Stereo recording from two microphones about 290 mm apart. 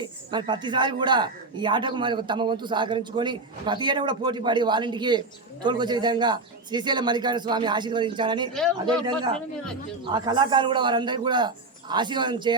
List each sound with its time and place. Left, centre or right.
0.0 s speech: centre